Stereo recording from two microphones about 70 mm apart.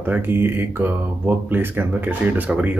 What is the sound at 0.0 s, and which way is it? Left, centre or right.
Speech, right.